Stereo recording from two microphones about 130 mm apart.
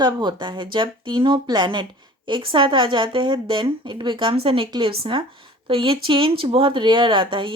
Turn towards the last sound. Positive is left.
turn(degrees=-40)  # may be behind; listen again after turning